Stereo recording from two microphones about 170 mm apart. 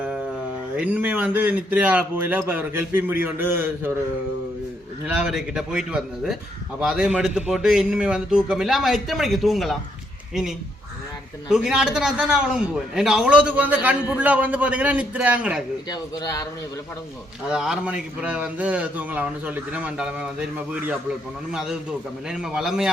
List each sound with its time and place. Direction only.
0.8 s a man's voice: 10° right (ahead or behind)
5.0 s a man's voice: 5° right (ahead or behind)
11.4 s a man's voice: 5° right (ahead or behind)
15.9 s speech: 25° left (ahead or behind)
17.5 s a man's voice: 5° right (ahead or behind)